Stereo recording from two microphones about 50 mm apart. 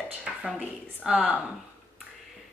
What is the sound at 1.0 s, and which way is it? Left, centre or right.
Speech, right.